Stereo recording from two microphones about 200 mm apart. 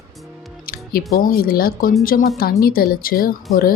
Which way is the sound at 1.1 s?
45° left (ahead or behind).